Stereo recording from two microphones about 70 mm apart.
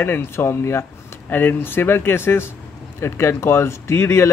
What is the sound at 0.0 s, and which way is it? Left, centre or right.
Speech, left.